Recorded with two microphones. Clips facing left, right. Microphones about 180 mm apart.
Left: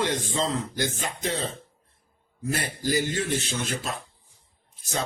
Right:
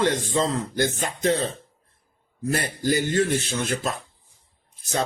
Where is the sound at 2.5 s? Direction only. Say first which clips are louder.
Right 3 dB; 50° right (ahead or behind).